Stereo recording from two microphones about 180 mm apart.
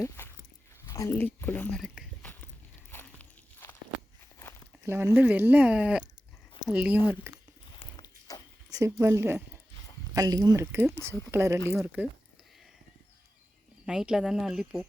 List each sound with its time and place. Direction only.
0.0 s dog: 15° left (ahead or behind)
0.9 s speech: 15° left (ahead or behind)
2.2 s biting: 10° left (ahead or behind)
2.9 s walk: 15° left (ahead or behind)
4.9 s speech: 15° right (ahead or behind)
7.3 s a sound: 15° right (ahead or behind)
7.8 s a sound: 25° left (ahead or behind)
8.7 s speech: 15° right (ahead or behind)
13.8 s speech: 5° right (ahead or behind)